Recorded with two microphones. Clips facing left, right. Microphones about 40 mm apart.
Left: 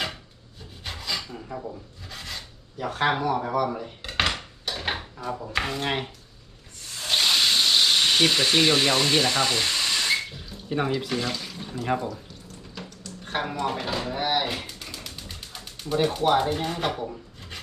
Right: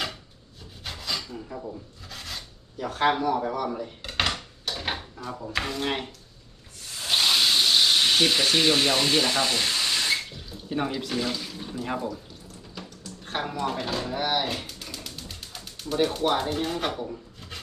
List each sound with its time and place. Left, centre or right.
0.9 s a sound: centre
2.0 s filing: centre
3.7 s dishes: centre
4.9 s speech: centre
7.0 s speech: centre
12.8 s a sound: centre
13.6 s speech: centre
14.7 s pigeon: centre